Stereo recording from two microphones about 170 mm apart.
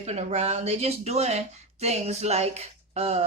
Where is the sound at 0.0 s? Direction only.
40° right (ahead or behind).